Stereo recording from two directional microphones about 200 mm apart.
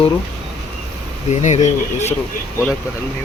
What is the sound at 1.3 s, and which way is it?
Speech, 35° left (ahead or behind).